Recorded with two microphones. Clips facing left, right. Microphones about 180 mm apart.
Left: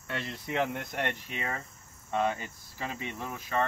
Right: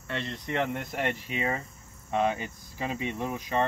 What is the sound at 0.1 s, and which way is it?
Speech, 5° left (ahead or behind).